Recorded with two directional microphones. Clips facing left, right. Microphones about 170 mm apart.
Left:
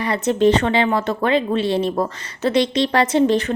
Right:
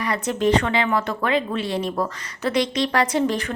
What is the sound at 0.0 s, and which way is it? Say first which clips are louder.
Speech: left 5 dB; 25° left (ahead or behind).